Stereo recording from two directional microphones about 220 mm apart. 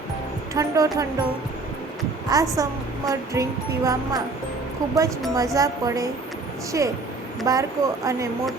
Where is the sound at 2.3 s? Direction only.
15° right (ahead or behind).